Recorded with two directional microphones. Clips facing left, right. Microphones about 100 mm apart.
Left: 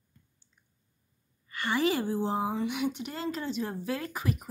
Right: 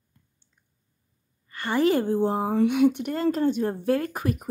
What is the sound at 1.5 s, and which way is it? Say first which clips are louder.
Speech: right 6 dB; 40° right (ahead or behind).